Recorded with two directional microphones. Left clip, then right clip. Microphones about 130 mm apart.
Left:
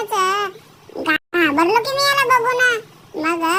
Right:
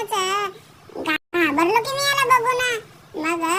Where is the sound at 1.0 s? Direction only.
35° left (ahead or behind).